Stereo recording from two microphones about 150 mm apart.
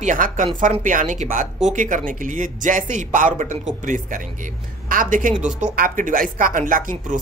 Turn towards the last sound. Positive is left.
turn(degrees=-60)  # may be behind; listen again after turning